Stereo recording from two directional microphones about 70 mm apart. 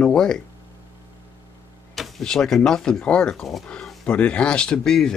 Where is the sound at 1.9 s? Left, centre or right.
Centre.